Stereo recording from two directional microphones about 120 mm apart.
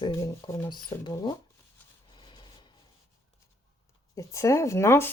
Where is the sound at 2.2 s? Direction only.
40° left (ahead or behind).